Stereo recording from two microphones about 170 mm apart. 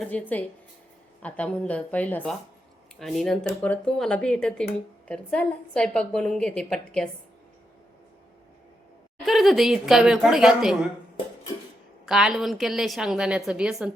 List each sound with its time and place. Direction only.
0.0 s a woman's voice: 10° left (ahead or behind)
9.2 s a woman's voice: centre (ahead or behind)
12.0 s a woman's voice: 5° right (ahead or behind)